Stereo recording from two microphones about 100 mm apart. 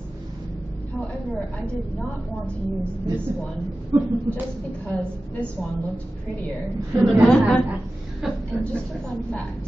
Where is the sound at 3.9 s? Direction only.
45° right (ahead or behind).